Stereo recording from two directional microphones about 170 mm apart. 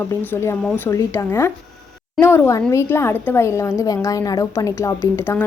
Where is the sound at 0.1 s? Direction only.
15° left (ahead or behind).